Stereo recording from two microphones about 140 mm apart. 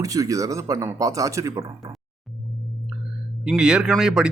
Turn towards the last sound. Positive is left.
turn(degrees=-5)  # may be behind; listen again after turning